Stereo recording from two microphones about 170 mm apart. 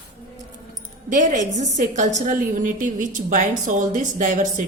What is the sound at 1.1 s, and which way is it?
A woman's voice, 45° right (ahead or behind).